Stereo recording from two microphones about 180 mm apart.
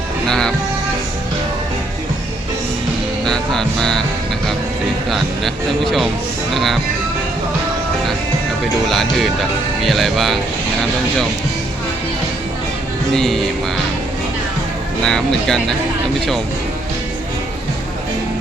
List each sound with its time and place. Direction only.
0.3 s music: 5° left (ahead or behind)
3.2 s music: 5° left (ahead or behind)
5.1 s a man's voice: centre (ahead or behind)
6.5 s music: centre (ahead or behind)
8.9 s a man's voice: centre (ahead or behind)
13.1 s a man's voice: centre (ahead or behind)
15.0 s a man's voice: 5° left (ahead or behind)